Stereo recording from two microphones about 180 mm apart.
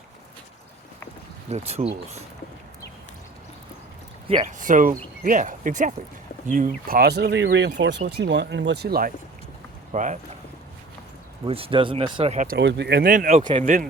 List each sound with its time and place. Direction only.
1.5 s speech: 35° right (ahead or behind)
4.4 s speech: 45° right (ahead or behind)
9.9 s speech: 45° right (ahead or behind)
11.4 s speech: 30° right (ahead or behind)
12.5 s speech: 70° right (ahead or behind)
13.1 s speech: 45° right (ahead or behind)
13.4 s a man's voice: 30° right (ahead or behind)